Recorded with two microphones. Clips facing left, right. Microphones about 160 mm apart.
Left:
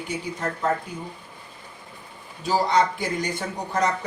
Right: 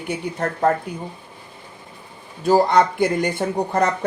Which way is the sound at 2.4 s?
55° right (ahead or behind).